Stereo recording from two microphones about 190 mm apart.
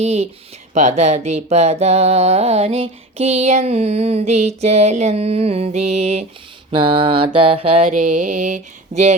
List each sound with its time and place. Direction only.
0.0 s music: 35° right (ahead or behind)